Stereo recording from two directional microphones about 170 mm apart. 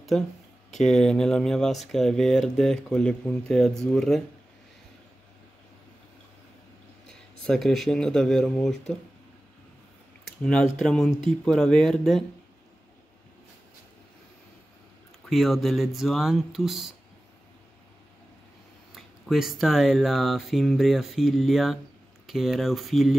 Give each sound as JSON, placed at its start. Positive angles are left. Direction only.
{"t": 0.7, "sound": "speech", "side_deg": 5}
{"t": 7.1, "sound": "speech", "side_deg": 5}
{"t": 10.4, "sound": "speech", "side_deg": 5}
{"t": 15.2, "sound": "speech", "side_deg": 0}
{"t": 18.9, "sound": "speech", "side_deg": 0}